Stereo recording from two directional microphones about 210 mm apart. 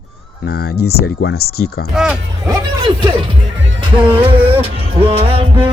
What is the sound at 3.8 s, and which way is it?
Music, 25° right (ahead or behind).